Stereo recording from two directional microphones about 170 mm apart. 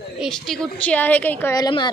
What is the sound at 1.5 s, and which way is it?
Speech, 25° left (ahead or behind).